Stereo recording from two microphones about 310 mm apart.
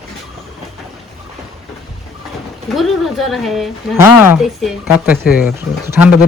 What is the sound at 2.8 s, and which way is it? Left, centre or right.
Speech, centre.